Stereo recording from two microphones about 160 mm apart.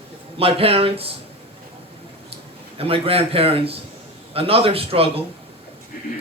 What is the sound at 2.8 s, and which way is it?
Speech, 35° right (ahead or behind).